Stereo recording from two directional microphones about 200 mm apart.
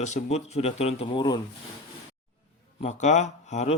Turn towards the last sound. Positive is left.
turn(degrees=35)  # may be behind; listen again after turning